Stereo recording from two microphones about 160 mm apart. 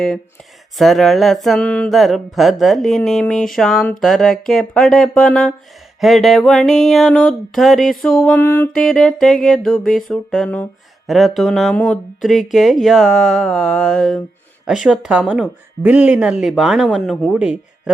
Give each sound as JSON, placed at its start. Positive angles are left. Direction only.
{"t": 0.8, "sound": "speech", "side_deg": 0}
{"t": 8.4, "sound": "music", "side_deg": 15}
{"t": 8.7, "sound": "speech", "side_deg": 0}